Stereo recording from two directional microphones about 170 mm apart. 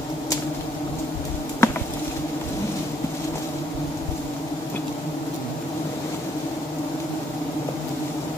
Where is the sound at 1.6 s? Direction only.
15° left (ahead or behind).